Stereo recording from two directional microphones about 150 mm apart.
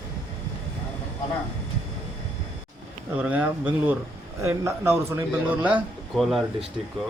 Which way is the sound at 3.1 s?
10° right (ahead or behind).